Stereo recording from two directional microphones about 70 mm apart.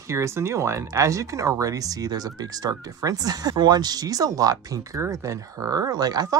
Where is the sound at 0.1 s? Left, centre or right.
Right.